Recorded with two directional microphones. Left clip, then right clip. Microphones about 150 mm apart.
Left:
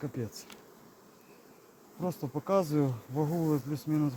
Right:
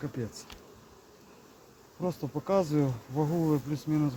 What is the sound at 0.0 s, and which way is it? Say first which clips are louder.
Speech: right 1 dB; 35° left (ahead or behind).